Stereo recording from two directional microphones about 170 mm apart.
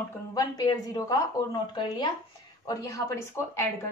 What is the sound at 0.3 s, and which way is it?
A woman's voice, 25° left (ahead or behind).